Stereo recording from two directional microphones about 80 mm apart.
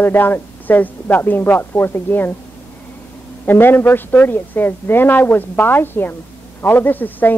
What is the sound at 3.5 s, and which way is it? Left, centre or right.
Speech, left.